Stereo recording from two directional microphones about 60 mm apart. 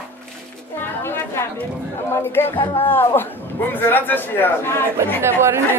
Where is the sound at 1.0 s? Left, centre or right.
Left.